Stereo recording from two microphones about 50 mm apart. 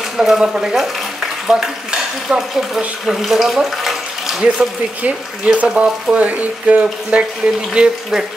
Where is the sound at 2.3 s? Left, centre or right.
Centre.